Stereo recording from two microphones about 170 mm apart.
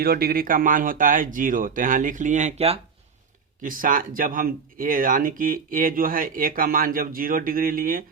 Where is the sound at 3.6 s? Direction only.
55° right (ahead or behind).